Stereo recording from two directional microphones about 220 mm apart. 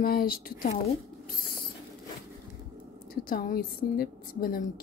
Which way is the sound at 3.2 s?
40° left (ahead or behind).